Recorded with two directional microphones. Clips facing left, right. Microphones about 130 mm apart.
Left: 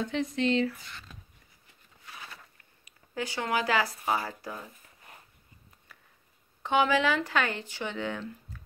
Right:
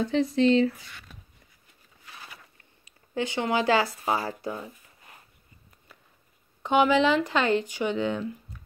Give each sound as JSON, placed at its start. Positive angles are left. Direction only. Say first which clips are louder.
{"t": 0.0, "sound": "speech", "louder": "right 6 dB", "side_deg": -35}
{"t": 2.8, "sound": "speech", "louder": "right 5 dB", "side_deg": -25}
{"t": 6.6, "sound": "speech", "louder": "right 4 dB", "side_deg": -15}